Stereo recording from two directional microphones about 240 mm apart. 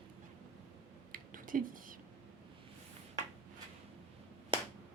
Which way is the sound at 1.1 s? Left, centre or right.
Right.